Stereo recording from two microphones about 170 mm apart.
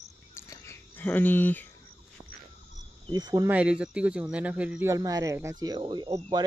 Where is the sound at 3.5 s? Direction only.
5° right (ahead or behind).